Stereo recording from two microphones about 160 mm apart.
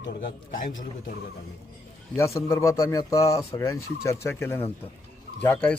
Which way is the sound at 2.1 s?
20° left (ahead or behind).